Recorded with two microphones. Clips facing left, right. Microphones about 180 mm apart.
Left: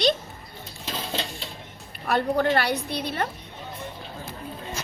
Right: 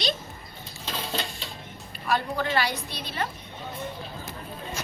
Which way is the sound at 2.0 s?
60° left (ahead or behind).